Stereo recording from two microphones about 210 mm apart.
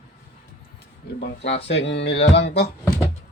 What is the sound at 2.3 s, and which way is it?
Speech, 55° left (ahead or behind).